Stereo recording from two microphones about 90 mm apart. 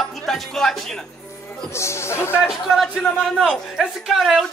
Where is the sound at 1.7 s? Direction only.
30° left (ahead or behind).